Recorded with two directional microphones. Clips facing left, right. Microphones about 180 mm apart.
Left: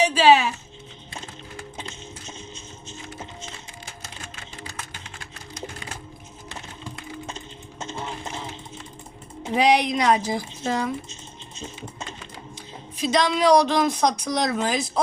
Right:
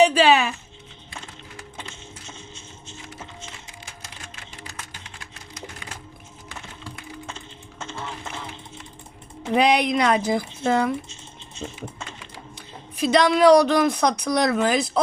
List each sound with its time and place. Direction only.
0.0 s speech: 55° right (ahead or behind)
1.9 s music: 20° left (ahead or behind)
6.5 s music: 20° left (ahead or behind)
9.5 s speech: 60° right (ahead or behind)
11.1 s typing: 20° left (ahead or behind)
13.0 s speech: 55° right (ahead or behind)